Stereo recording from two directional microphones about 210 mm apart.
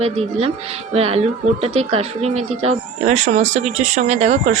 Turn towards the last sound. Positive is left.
turn(degrees=-30)  # may be behind; listen again after turning